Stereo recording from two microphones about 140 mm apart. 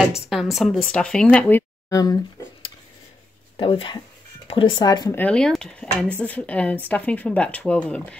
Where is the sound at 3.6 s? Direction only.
40° left (ahead or behind).